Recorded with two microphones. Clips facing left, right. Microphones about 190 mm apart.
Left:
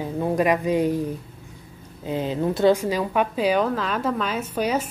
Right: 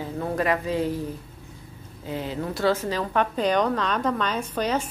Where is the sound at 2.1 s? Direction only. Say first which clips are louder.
Left 6 dB; 20° left (ahead or behind).